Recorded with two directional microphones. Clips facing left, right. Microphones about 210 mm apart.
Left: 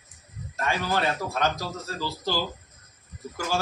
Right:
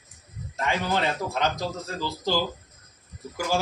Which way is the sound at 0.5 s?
20° right (ahead or behind).